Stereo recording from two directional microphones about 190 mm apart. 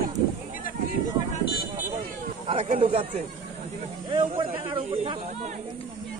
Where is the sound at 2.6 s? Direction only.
30° right (ahead or behind).